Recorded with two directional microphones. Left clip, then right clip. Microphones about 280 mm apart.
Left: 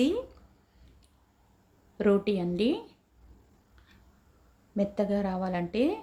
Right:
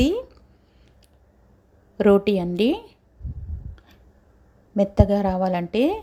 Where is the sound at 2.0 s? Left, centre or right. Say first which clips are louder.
Right 8 dB; right.